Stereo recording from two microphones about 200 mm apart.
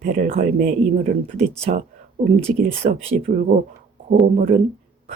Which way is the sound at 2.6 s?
35° right (ahead or behind).